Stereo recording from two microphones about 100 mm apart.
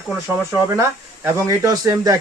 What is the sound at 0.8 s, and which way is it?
Speech, 30° right (ahead or behind).